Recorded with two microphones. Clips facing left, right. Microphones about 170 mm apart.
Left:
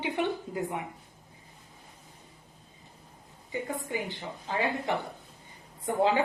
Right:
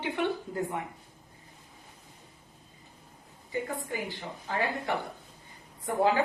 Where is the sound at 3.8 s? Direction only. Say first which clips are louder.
Left 1 dB; 20° left (ahead or behind).